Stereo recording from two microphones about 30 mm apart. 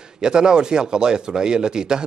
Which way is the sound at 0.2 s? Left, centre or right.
Right.